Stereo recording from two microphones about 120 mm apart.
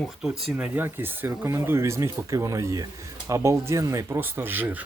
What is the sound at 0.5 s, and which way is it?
Speech, 15° right (ahead or behind).